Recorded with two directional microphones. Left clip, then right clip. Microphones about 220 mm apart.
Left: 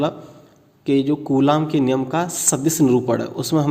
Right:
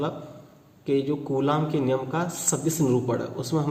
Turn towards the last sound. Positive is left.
turn(degrees=40)  # may be behind; listen again after turning